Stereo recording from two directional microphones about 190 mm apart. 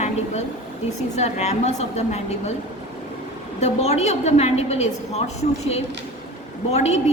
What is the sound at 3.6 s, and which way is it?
A woman's voice, 35° left (ahead or behind).